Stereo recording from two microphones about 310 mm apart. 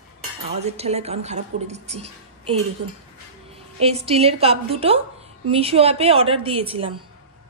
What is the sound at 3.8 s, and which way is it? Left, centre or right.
A woman's voice, centre.